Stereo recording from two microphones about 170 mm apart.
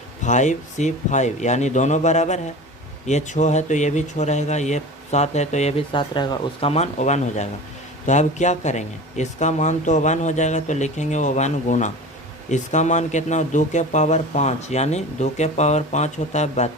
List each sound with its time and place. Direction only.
0.3 s speech: 45° left (ahead or behind)